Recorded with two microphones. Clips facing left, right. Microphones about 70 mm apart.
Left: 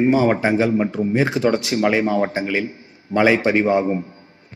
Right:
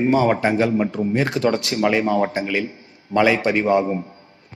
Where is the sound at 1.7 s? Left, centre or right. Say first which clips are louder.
Left 1 dB; left.